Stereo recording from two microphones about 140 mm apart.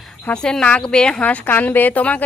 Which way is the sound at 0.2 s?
10° left (ahead or behind).